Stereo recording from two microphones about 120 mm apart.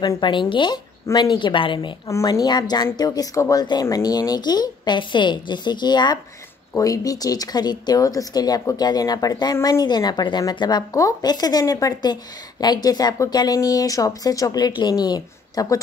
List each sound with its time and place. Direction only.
0.0 s speech: 35° left (ahead or behind)